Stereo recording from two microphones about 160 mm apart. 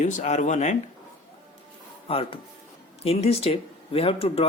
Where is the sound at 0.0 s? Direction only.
50° left (ahead or behind).